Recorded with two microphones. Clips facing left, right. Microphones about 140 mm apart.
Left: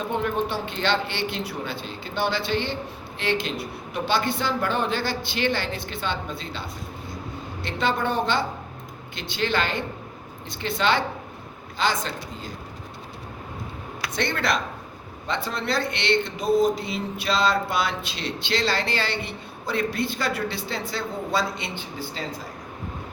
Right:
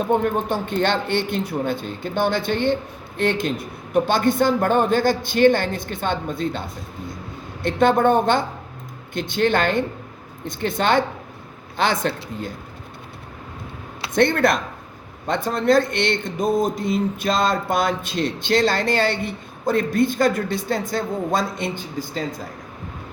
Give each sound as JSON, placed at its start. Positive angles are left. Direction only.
{"t": 0.1, "sound": "a man's voice", "side_deg": -45}
{"t": 14.2, "sound": "speech", "side_deg": -50}